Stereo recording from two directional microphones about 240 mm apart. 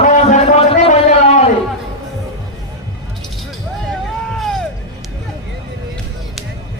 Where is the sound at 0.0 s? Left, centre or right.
Left.